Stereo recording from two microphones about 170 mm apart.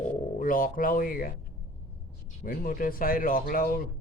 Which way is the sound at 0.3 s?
55° left (ahead or behind).